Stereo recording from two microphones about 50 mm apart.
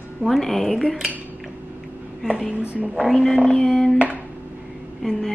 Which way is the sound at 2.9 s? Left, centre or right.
Centre.